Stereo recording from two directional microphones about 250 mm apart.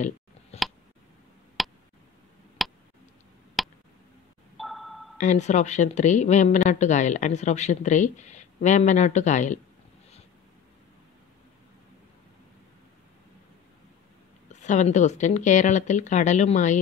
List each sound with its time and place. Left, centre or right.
1.6 s a sound: centre
5.1 s speech: left
14.5 s speech: left